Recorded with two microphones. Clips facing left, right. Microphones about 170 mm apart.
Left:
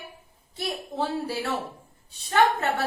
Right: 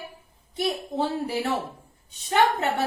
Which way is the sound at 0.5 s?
20° right (ahead or behind).